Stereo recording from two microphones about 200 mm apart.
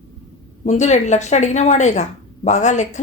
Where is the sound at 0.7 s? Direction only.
35° left (ahead or behind).